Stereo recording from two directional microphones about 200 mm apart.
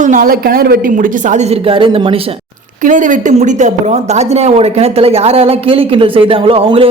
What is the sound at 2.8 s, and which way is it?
Speech, 40° right (ahead or behind).